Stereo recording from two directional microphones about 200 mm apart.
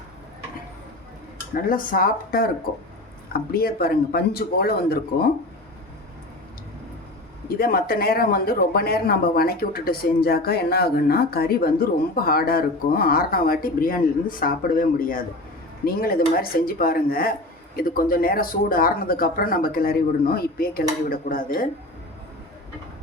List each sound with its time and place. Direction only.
1.6 s speech: 45° left (ahead or behind)
7.4 s speech: 50° left (ahead or behind)